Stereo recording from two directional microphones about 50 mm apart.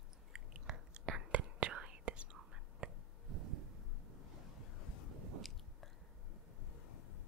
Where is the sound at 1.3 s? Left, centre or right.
Right.